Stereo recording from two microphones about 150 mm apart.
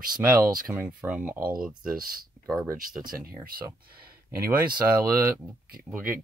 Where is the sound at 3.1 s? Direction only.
75° right (ahead or behind).